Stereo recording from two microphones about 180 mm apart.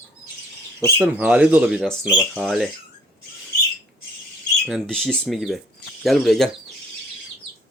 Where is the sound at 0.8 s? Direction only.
10° right (ahead or behind).